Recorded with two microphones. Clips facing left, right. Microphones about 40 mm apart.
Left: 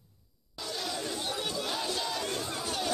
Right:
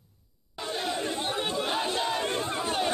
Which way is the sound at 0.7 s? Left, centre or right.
Right.